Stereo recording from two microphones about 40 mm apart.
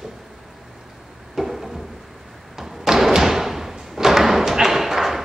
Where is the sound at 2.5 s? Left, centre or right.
Centre.